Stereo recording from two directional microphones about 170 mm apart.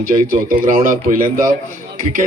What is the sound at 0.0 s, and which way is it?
A man's voice, 55° right (ahead or behind).